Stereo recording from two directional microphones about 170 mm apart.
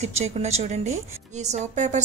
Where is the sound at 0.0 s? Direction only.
40° right (ahead or behind).